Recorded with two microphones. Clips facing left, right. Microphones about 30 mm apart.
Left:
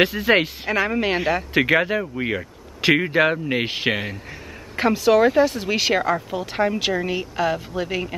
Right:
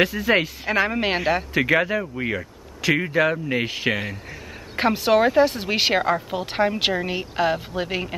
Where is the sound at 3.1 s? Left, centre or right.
Left.